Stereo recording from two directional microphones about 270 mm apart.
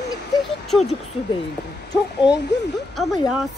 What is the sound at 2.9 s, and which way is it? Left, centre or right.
Speech, centre.